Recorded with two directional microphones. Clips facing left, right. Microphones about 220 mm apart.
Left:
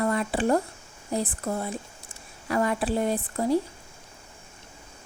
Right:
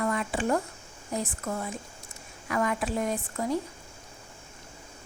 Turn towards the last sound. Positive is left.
turn(degrees=35)  # may be behind; listen again after turning